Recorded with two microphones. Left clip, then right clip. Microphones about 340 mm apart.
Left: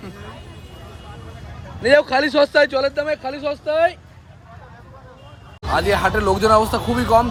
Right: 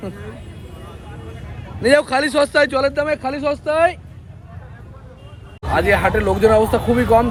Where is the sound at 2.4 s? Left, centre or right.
Centre.